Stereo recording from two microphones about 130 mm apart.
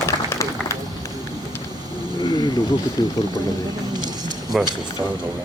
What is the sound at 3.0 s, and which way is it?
Speech, 30° left (ahead or behind).